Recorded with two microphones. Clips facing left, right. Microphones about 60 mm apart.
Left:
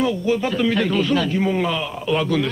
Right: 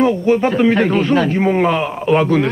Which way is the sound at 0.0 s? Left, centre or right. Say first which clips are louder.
Right 6 dB; right.